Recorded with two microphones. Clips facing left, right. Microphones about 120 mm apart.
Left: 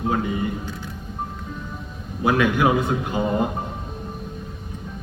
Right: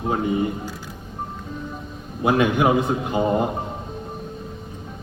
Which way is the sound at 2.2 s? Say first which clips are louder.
Right 1 dB; 25° right (ahead or behind).